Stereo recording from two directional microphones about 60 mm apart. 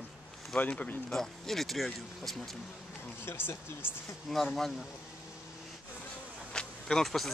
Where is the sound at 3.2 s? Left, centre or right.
Left.